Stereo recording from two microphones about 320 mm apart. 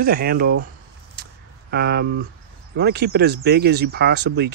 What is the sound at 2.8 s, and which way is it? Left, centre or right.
Speech, right.